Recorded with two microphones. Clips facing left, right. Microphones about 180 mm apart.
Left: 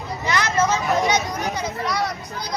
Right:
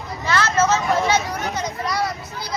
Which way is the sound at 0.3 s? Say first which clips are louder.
Right 2 dB; 15° left (ahead or behind).